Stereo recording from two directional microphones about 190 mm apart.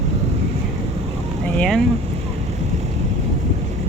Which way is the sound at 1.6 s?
5° left (ahead or behind).